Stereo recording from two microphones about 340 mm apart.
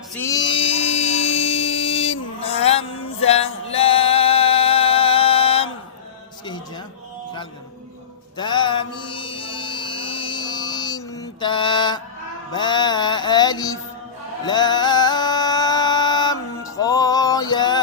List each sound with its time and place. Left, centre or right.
0.2 s a sound: centre
6.4 s music: centre
8.4 s mantra: centre
12.5 s music: centre